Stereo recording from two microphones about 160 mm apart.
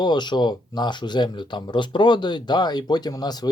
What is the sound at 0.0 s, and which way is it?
Speech, 25° left (ahead or behind).